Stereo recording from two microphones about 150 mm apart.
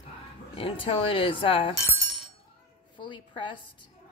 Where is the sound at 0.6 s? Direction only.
40° left (ahead or behind).